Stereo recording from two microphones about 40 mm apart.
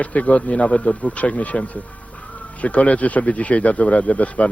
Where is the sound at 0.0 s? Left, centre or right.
Left.